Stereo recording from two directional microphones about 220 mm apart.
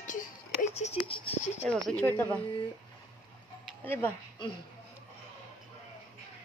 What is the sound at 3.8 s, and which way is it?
Speech, 10° left (ahead or behind).